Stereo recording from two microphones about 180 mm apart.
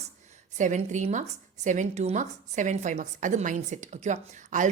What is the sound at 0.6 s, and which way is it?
A woman's voice, 45° right (ahead or behind).